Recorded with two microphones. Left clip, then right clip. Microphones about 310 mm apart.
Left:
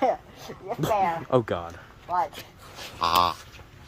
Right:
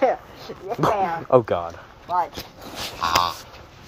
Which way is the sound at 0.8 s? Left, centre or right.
Centre.